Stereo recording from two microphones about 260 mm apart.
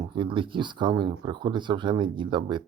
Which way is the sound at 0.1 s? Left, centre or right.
Centre.